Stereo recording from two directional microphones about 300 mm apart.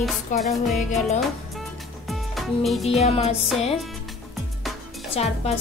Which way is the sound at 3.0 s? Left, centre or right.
Left.